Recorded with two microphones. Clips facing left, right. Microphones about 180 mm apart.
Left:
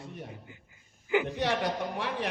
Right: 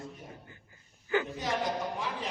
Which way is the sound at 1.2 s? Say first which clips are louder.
Left 4 dB; 75° left (ahead or behind).